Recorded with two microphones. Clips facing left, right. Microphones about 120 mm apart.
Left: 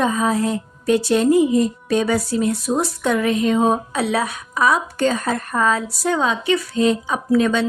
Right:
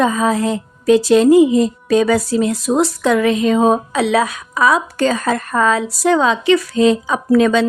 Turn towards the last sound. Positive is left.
turn(degrees=-90)